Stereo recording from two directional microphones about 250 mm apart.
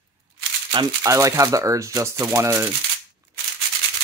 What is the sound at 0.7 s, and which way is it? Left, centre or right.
Speech, centre.